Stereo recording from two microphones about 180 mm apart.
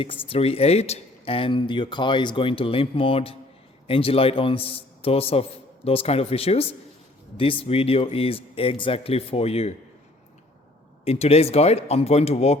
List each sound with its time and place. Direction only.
0.0 s a man's voice: 30° left (ahead or behind)
11.0 s a man's voice: 35° left (ahead or behind)